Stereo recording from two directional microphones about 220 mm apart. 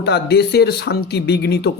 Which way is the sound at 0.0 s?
50° left (ahead or behind).